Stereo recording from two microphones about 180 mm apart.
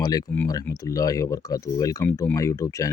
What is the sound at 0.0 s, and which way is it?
Speech, 20° left (ahead or behind).